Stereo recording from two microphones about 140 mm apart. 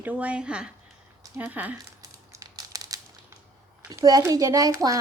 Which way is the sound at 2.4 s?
25° right (ahead or behind).